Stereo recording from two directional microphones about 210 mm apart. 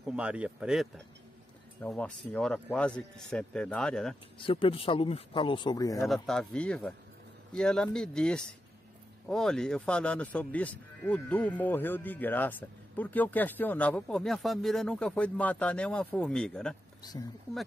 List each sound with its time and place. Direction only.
0.0 s speech: 5° right (ahead or behind)
4.4 s speech: 25° left (ahead or behind)
6.0 s speech: centre (ahead or behind)